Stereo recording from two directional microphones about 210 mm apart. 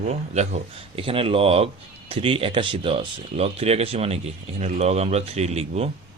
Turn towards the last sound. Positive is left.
turn(degrees=-30)  # may be behind; listen again after turning